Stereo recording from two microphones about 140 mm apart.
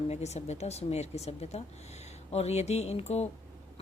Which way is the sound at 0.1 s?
50° left (ahead or behind).